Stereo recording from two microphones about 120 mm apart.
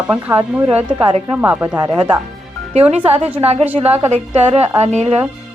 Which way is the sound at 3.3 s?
55° right (ahead or behind).